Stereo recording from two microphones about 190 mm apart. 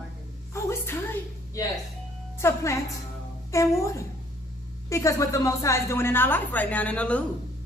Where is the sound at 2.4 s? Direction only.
15° left (ahead or behind).